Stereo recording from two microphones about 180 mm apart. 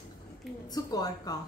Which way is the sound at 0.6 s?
20° left (ahead or behind).